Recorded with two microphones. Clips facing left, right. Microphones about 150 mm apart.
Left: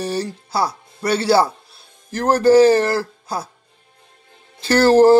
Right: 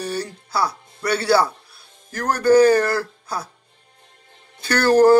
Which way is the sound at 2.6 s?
25° left (ahead or behind).